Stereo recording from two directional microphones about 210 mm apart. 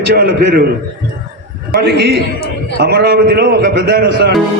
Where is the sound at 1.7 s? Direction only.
50° right (ahead or behind).